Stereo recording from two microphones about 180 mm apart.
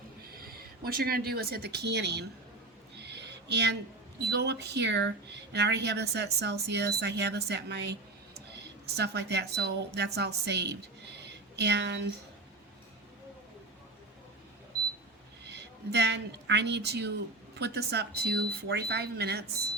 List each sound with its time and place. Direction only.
0.3 s speech: 55° right (ahead or behind)
3.0 s a sound: 70° right (ahead or behind)
4.2 s speech: 65° right (ahead or behind)
15.4 s speech: 70° right (ahead or behind)